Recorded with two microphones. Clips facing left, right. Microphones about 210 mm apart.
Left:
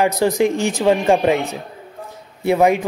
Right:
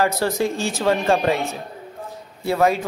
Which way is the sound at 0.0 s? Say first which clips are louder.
Left 4 dB; 15° left (ahead or behind).